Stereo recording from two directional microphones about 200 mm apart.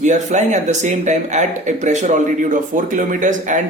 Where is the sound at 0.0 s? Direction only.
35° right (ahead or behind).